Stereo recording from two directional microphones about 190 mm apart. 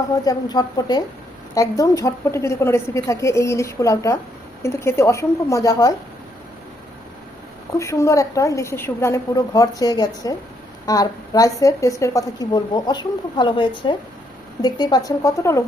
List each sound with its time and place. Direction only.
0.3 s a woman's voice: 20° left (ahead or behind)
7.8 s a woman's voice: 15° left (ahead or behind)